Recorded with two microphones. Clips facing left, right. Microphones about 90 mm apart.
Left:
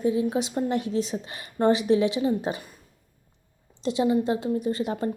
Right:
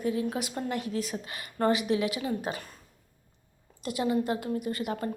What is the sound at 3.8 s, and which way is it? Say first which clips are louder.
A woman's voice: left 5 dB; 25° left (ahead or behind).